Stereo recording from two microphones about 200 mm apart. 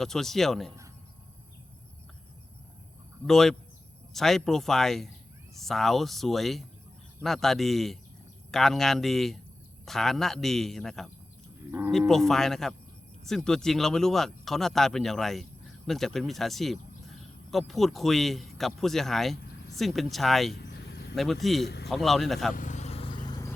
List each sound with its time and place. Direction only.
0.0 s speech: centre (ahead or behind)
3.2 s speech: centre (ahead or behind)
20.6 s a sound: 55° left (ahead or behind)
21.4 s speech: centre (ahead or behind)
22.5 s vehicle: 40° left (ahead or behind); by 23.6 s 20° left (ahead or behind)